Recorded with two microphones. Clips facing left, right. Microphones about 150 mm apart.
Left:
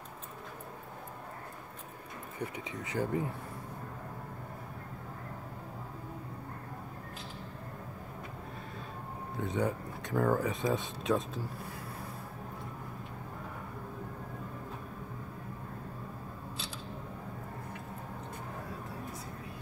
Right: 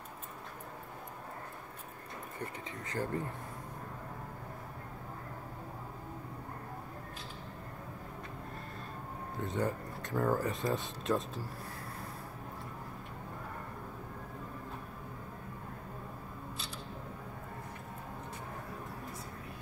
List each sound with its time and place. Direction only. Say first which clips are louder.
2.4 s speech: left 5 dB; 10° left (ahead or behind)
9.4 s speech: left 2 dB; centre (ahead or behind)